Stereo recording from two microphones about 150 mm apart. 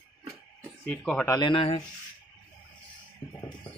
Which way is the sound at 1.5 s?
35° left (ahead or behind).